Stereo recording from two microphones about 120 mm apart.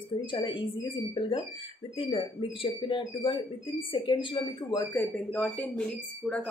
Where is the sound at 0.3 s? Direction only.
45° left (ahead or behind).